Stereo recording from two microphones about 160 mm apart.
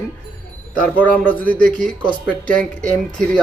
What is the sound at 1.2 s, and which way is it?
Speech, 10° left (ahead or behind).